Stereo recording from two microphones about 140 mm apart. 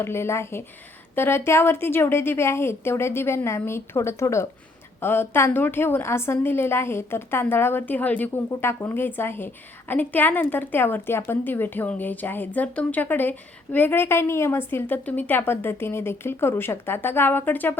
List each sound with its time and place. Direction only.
0.0 s a woman's voice: 20° left (ahead or behind)